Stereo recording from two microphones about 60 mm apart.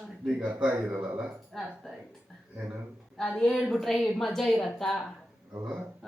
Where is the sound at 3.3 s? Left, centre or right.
Centre.